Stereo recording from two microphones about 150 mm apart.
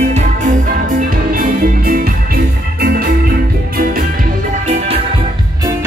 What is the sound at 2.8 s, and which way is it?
Music, 85° right.